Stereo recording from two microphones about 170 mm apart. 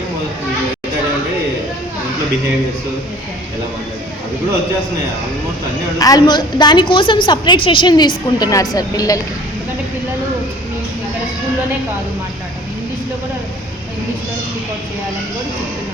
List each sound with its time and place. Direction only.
6.0 s a woman's voice: 20° left (ahead or behind)